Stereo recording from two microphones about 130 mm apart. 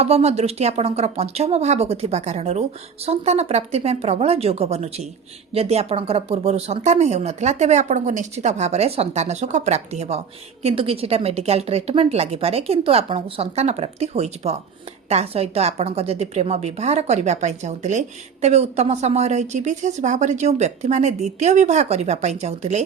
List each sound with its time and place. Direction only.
0.0 s a woman's voice: 55° right (ahead or behind)